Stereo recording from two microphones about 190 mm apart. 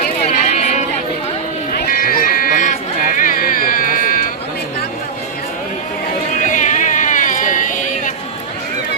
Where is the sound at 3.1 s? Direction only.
45° left (ahead or behind).